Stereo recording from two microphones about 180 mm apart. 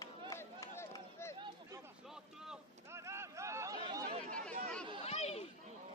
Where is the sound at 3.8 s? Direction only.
25° right (ahead or behind).